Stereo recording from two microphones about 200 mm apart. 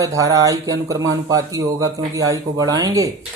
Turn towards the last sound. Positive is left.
turn(degrees=-15)  # may be behind; listen again after turning